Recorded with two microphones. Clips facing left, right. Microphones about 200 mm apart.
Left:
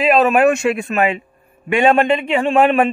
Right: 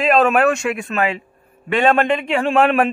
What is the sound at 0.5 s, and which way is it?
A man's voice, 25° left (ahead or behind).